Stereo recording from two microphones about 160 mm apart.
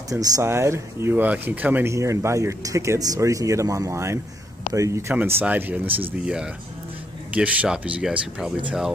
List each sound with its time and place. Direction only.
0.1 s speech: 20° right (ahead or behind); by 8.9 s 5° right (ahead or behind)